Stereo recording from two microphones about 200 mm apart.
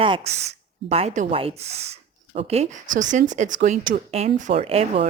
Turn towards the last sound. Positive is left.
turn(degrees=-30)  # may be behind; listen again after turning